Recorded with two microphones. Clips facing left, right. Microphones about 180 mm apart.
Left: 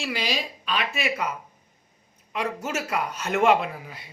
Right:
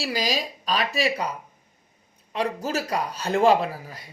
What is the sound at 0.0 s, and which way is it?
A man's voice, 40° right (ahead or behind).